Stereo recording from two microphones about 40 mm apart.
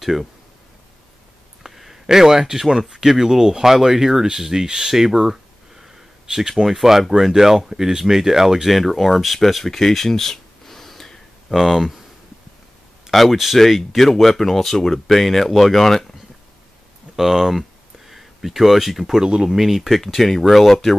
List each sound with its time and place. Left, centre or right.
0.0 s speech: centre
1.6 s a sound: centre
2.9 s speech: centre
13.1 s speech: centre
17.1 s a sound: centre
19.1 s speech: centre
19.5 s speech: centre